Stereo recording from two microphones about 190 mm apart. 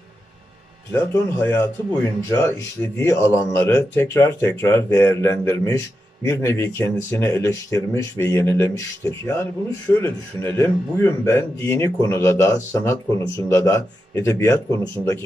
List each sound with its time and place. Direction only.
0.9 s speech: 10° left (ahead or behind)